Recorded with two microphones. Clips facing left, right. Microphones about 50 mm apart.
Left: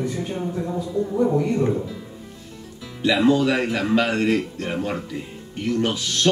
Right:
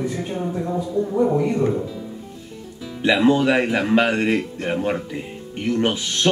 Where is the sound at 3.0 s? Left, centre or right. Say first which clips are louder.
Right 1 dB; right.